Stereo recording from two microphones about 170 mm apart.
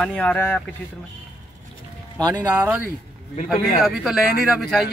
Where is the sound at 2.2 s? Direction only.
15° right (ahead or behind).